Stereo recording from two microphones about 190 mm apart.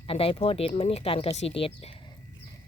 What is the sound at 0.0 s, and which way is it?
Speech, 30° left (ahead or behind).